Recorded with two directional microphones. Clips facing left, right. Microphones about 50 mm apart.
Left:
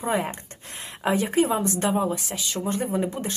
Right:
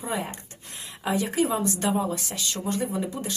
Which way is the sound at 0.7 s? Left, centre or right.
Left.